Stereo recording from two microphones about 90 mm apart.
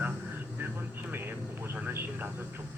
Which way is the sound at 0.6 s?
25° right (ahead or behind).